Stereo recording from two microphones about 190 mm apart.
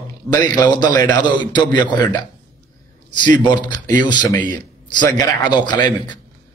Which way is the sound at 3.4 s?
25° left (ahead or behind).